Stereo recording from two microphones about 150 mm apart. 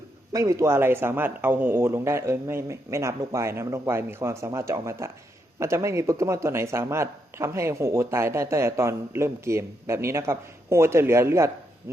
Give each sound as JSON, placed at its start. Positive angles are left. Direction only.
{"t": 0.3, "sound": "a man's voice", "side_deg": -20}